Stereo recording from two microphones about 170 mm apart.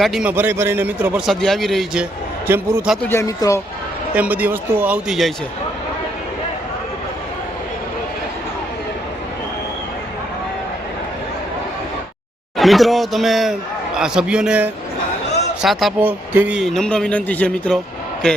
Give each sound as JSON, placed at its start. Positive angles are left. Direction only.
{"t": 0.0, "sound": "speech", "side_deg": -5}
{"t": 1.3, "sound": "a man's voice", "side_deg": 0}
{"t": 2.8, "sound": "a man's voice", "side_deg": 0}
{"t": 3.1, "sound": "speech", "side_deg": 20}
{"t": 4.1, "sound": "speech", "side_deg": -10}
{"t": 12.5, "sound": "a man's voice", "side_deg": 0}